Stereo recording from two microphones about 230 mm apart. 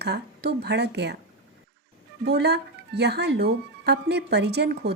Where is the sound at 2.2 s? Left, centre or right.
Right.